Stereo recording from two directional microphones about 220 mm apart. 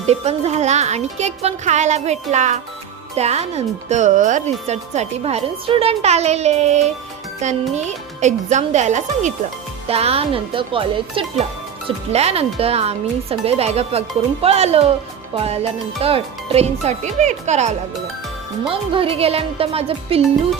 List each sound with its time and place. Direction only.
0.0 s speech: 30° right (ahead or behind)